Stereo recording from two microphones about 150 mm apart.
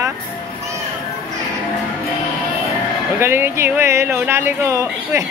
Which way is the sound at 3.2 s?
15° right (ahead or behind).